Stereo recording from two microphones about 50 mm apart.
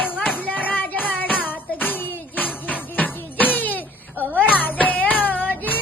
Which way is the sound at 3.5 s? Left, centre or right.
Left.